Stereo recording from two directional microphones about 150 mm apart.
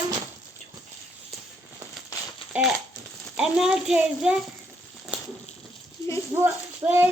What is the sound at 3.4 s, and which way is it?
A child's voice, 5° right (ahead or behind).